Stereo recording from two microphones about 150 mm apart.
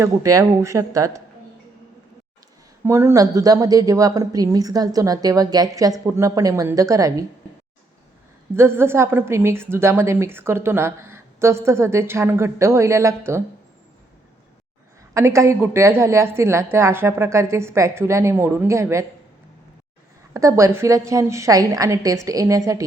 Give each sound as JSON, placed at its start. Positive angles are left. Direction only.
{"t": 0.0, "sound": "a woman's voice", "side_deg": -20}
{"t": 2.8, "sound": "a woman's voice", "side_deg": -15}
{"t": 8.5, "sound": "a woman's voice", "side_deg": -15}
{"t": 15.1, "sound": "a woman's voice", "side_deg": -20}
{"t": 20.3, "sound": "a woman's voice", "side_deg": -20}